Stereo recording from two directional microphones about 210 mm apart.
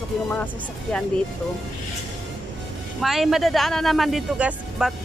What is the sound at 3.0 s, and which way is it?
Speech, centre (ahead or behind).